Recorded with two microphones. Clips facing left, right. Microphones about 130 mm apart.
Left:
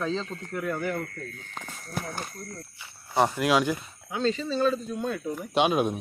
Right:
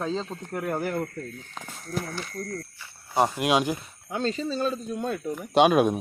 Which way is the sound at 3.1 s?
15° right (ahead or behind).